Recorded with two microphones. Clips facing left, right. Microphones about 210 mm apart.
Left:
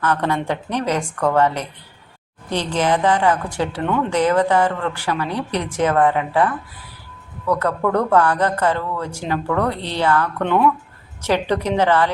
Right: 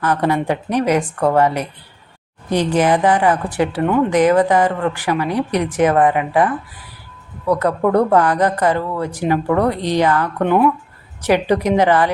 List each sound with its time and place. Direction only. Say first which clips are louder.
0.0 s speech: right 3 dB; 10° right (ahead or behind)